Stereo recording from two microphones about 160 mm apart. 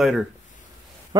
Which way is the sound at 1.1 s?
25° right (ahead or behind).